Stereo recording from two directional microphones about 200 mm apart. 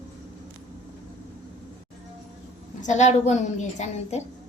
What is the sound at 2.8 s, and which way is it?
A woman's voice, 35° left (ahead or behind).